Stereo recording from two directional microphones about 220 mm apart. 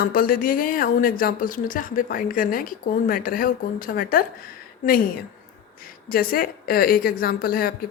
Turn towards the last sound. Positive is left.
turn(degrees=40)  # may be behind; listen again after turning